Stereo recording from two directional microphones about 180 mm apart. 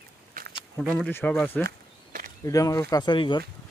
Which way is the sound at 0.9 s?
5° left (ahead or behind).